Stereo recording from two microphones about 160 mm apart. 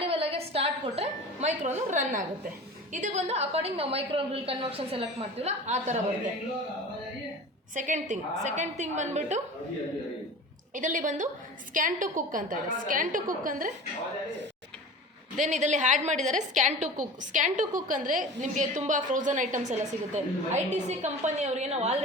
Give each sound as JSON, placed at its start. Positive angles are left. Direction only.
{"t": 0.0, "sound": "music", "side_deg": -35}
{"t": 2.9, "sound": "a woman's voice", "side_deg": -50}
{"t": 7.8, "sound": "a woman's voice", "side_deg": -50}
{"t": 10.8, "sound": "a woman's voice", "side_deg": -55}
{"t": 15.4, "sound": "a woman's voice", "side_deg": -50}